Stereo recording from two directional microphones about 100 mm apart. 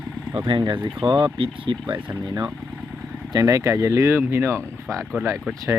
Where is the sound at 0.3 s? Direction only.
55° right (ahead or behind).